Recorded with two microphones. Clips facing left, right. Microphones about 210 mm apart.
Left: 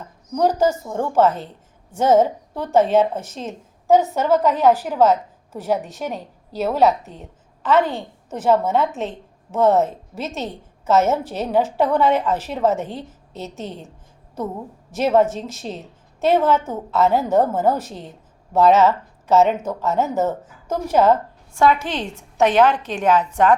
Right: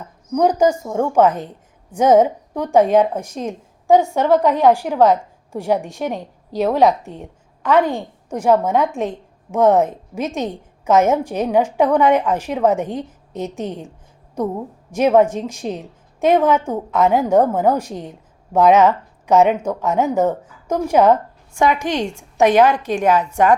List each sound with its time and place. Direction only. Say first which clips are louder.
0.3 s a woman's voice: right 3 dB; 15° right (ahead or behind)